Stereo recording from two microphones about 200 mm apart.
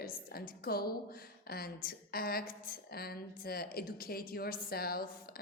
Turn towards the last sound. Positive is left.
turn(degrees=50)  # may be behind; listen again after turning